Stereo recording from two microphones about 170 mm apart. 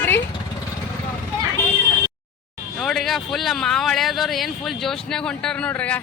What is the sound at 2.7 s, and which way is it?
Speech, centre (ahead or behind).